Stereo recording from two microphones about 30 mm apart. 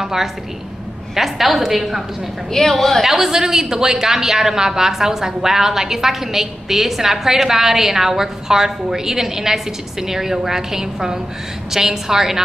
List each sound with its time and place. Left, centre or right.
0.0 s a woman's voice: centre
2.7 s a woman's voice: centre
3.3 s a woman's voice: centre